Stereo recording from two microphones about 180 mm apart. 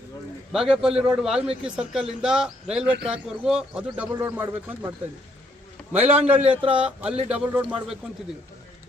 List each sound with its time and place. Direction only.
0.5 s a man's voice: 5° right (ahead or behind)
6.6 s speech: 30° right (ahead or behind)
6.8 s a man's voice: 5° right (ahead or behind)